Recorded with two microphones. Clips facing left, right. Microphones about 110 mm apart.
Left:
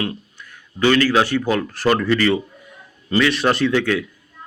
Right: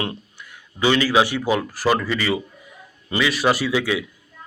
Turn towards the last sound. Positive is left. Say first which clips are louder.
# left 3 dB
turn(degrees=-10)  # may be behind; listen again after turning